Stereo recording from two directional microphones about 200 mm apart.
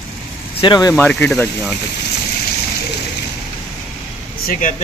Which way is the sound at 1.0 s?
5° left (ahead or behind).